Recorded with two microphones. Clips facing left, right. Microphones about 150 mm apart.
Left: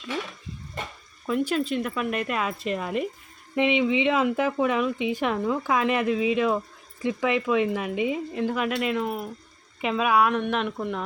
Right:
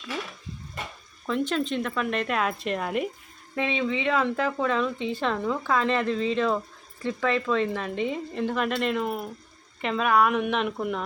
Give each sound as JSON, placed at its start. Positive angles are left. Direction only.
{"t": 1.3, "sound": "speech", "side_deg": 5}
{"t": 3.5, "sound": "speech", "side_deg": 15}